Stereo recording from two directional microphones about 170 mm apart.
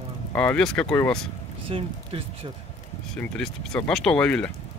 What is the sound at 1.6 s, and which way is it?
Speech, 30° right (ahead or behind).